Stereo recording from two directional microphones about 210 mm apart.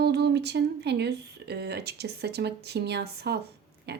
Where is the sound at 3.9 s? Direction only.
50° right (ahead or behind).